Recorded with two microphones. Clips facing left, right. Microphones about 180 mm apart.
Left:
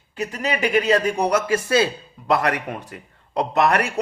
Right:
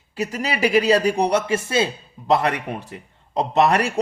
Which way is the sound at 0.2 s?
35° right (ahead or behind).